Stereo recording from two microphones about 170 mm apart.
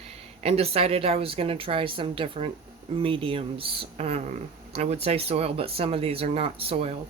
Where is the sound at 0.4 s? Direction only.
35° right (ahead or behind).